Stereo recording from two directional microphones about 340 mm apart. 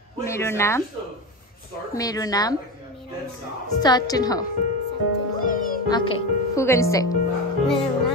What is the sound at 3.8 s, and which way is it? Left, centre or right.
Speech, centre.